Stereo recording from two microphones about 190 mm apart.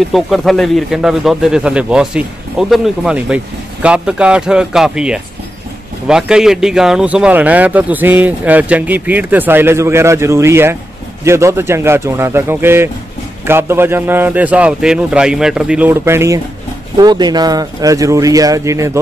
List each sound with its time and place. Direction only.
0.1 s a man's voice: centre (ahead or behind); by 18.9 s 15° right (ahead or behind)